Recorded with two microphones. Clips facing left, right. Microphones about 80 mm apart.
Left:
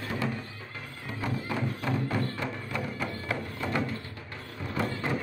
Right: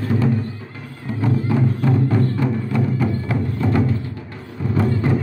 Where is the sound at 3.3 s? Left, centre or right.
Centre.